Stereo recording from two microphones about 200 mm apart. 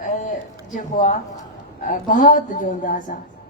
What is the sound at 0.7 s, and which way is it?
A woman's voice, 40° left (ahead or behind).